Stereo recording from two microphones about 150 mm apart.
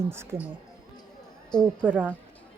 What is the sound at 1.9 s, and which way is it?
Speech, 10° right (ahead or behind).